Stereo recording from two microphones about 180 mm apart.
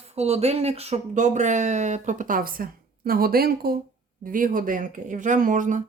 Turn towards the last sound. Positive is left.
turn(degrees=-45)  # may be behind; listen again after turning